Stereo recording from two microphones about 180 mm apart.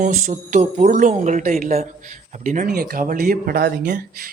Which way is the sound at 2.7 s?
55° right (ahead or behind).